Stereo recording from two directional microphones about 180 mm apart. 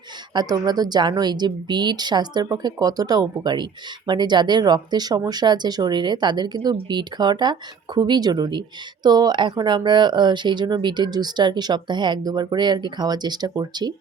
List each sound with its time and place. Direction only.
0.3 s a woman's voice: 20° right (ahead or behind)